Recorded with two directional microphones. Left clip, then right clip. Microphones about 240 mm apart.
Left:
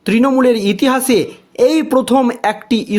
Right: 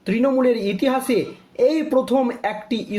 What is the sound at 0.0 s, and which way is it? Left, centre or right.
Speech, left.